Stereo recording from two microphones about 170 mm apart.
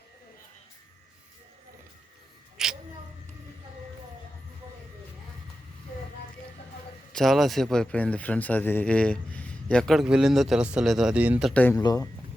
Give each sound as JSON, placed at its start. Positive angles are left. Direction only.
{"t": 2.6, "sound": "a sound", "side_deg": -5}
{"t": 7.1, "sound": "speech", "side_deg": 0}
{"t": 11.5, "sound": "speech", "side_deg": 10}
{"t": 11.8, "sound": "speech", "side_deg": 25}